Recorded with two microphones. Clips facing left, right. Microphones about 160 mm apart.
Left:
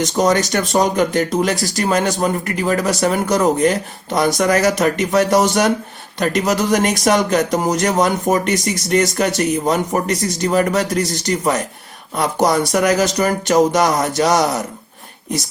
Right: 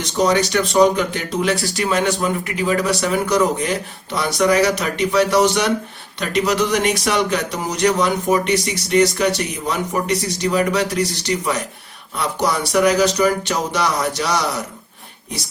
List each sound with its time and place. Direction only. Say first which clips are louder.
0.0 s speech: left 2 dB; 45° left (ahead or behind)